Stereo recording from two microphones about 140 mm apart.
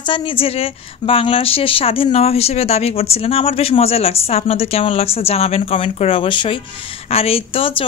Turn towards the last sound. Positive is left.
turn(degrees=40)  # may be behind; listen again after turning